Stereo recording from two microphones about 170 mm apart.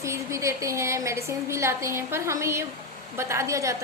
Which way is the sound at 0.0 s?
15° right (ahead or behind).